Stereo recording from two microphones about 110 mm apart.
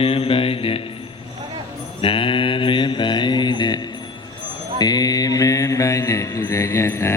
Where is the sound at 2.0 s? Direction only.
55° left (ahead or behind).